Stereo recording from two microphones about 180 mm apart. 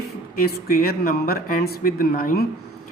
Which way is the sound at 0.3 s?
55° left (ahead or behind).